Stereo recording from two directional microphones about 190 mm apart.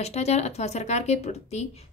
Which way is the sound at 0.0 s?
35° left (ahead or behind).